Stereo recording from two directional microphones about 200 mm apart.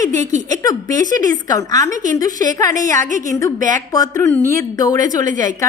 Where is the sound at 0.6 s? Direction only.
20° left (ahead or behind).